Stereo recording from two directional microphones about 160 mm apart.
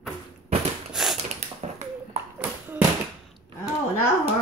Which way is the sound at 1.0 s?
5° right (ahead or behind).